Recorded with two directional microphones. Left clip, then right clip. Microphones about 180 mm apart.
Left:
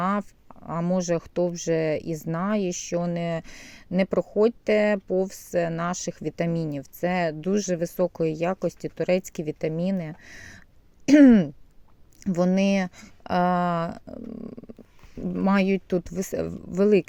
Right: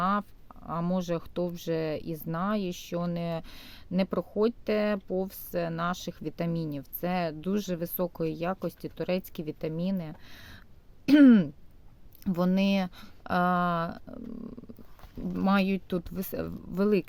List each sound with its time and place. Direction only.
0.0 s speech: 20° left (ahead or behind)